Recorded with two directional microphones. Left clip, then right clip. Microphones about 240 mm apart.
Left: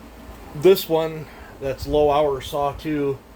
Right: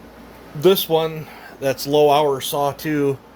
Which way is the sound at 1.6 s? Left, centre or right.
Right.